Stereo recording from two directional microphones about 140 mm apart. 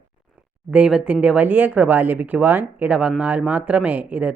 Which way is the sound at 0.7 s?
5° right (ahead or behind).